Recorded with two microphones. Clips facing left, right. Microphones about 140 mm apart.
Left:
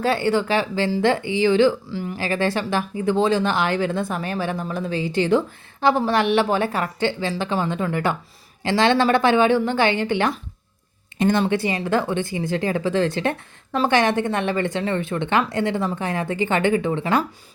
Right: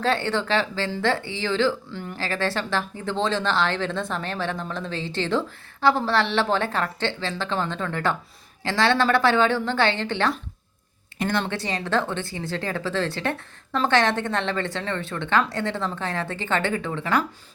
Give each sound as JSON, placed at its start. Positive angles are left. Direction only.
{"t": 0.0, "sound": "speech", "side_deg": 10}